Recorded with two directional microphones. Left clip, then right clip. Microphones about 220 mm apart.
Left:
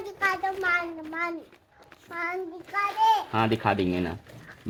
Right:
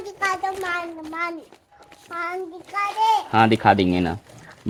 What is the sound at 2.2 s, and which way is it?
Speech, 20° right (ahead or behind).